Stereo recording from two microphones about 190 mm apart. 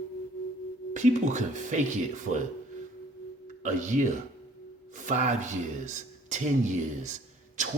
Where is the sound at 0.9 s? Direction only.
40° right (ahead or behind).